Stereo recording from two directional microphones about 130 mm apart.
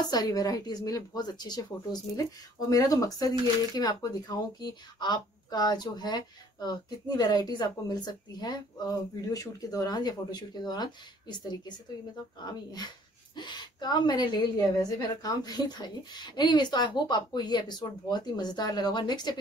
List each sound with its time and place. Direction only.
0.0 s speech: 30° left (ahead or behind)
13.4 s speech: 35° left (ahead or behind)